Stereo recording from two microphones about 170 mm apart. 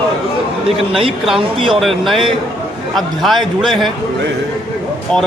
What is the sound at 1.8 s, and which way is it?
A man's voice, centre (ahead or behind).